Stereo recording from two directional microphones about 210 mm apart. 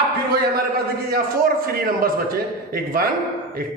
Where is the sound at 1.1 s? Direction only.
45° right (ahead or behind).